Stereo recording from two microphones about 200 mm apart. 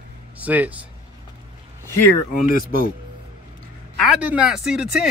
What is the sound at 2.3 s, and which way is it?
Speech, 45° left (ahead or behind).